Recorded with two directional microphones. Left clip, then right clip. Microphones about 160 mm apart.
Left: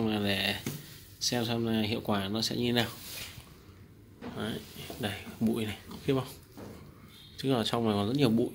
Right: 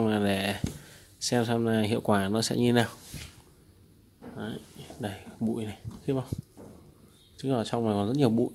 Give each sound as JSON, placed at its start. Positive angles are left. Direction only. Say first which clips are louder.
{"t": 0.0, "sound": "a sound", "louder": "right 3 dB", "side_deg": -50}
{"t": 1.3, "sound": "speech", "louder": "right 7 dB", "side_deg": -50}
{"t": 4.4, "sound": "speech", "louder": "left 1 dB", "side_deg": -20}
{"t": 7.3, "sound": "speech", "louder": "even", "side_deg": -25}